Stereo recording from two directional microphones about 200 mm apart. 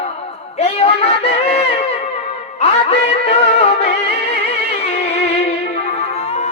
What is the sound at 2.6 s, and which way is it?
Music, 35° left (ahead or behind).